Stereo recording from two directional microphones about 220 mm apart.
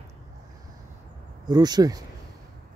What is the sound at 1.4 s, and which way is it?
Speech, 20° right (ahead or behind).